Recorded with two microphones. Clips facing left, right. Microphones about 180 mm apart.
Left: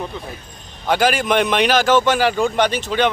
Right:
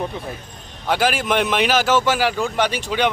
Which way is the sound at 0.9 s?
5° right (ahead or behind).